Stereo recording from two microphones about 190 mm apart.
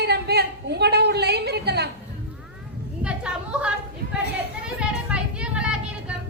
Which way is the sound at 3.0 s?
5° right (ahead or behind).